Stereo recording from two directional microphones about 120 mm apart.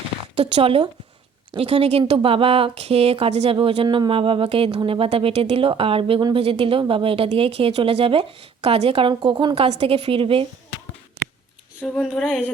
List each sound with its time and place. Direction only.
0.3 s speech: 55° right (ahead or behind)
3.8 s speech: 40° right (ahead or behind)
9.6 s speech: 60° right (ahead or behind)
11.8 s speech: 5° left (ahead or behind)